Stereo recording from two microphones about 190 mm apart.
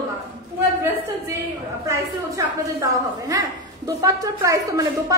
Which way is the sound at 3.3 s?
15° right (ahead or behind).